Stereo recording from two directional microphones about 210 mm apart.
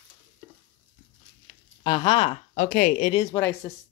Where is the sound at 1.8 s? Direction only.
20° left (ahead or behind).